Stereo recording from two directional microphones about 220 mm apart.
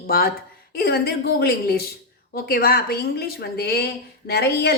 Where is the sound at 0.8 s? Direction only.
45° left (ahead or behind).